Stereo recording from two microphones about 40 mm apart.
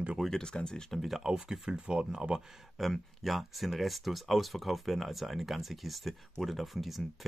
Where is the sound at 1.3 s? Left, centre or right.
Centre.